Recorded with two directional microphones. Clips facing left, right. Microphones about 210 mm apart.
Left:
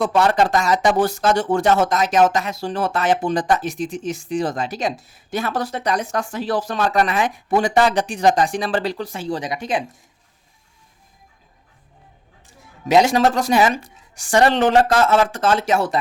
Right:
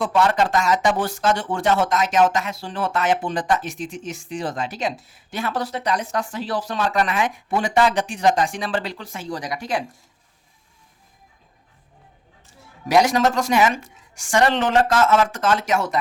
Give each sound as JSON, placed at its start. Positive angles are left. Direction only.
{"t": 0.0, "sound": "speech", "side_deg": 40}
{"t": 12.9, "sound": "speech", "side_deg": 25}